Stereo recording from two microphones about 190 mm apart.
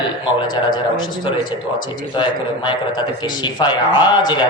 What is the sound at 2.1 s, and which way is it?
A man's voice, 25° left (ahead or behind).